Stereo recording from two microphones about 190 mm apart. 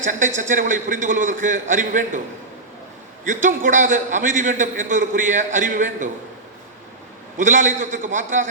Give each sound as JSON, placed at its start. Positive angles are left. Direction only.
{"t": 0.3, "sound": "a man's voice", "side_deg": -40}
{"t": 3.2, "sound": "a man's voice", "side_deg": -40}
{"t": 7.3, "sound": "a man's voice", "side_deg": -40}